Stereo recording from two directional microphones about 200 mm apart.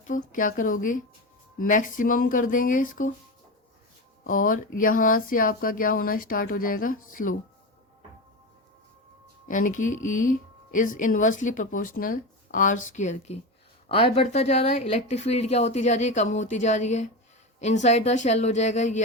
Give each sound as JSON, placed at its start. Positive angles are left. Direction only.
{"t": 0.1, "sound": "a woman's voice", "side_deg": 40}
{"t": 4.2, "sound": "speech", "side_deg": 45}
{"t": 9.5, "sound": "a woman's voice", "side_deg": 40}